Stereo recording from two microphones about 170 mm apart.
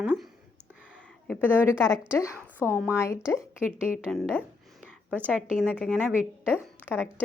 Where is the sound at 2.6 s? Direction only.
10° right (ahead or behind).